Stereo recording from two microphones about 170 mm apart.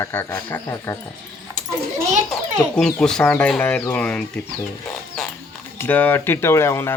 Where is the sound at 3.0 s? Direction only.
5° left (ahead or behind).